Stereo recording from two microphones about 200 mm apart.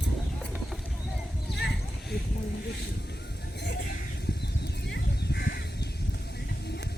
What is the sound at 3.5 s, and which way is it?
Vehicle, 60° left (ahead or behind).